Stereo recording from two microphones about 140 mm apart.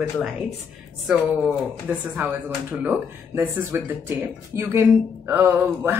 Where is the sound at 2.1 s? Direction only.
10° right (ahead or behind).